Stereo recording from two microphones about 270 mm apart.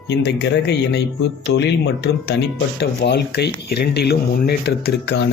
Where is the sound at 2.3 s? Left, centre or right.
Left.